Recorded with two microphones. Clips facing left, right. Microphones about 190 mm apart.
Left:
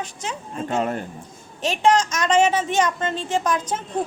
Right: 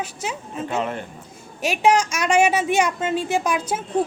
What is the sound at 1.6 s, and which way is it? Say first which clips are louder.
Speech: even; 10° right (ahead or behind).